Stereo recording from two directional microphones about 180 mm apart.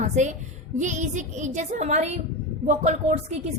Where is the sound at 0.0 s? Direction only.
45° right (ahead or behind).